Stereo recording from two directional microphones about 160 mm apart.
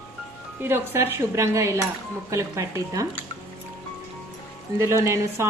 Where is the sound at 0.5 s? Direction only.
15° right (ahead or behind).